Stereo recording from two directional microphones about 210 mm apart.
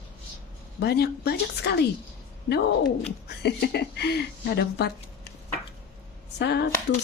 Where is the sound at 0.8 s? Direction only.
50° left (ahead or behind).